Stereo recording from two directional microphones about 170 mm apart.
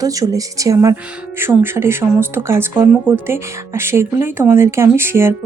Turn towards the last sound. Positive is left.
turn(degrees=-15)  # may be behind; listen again after turning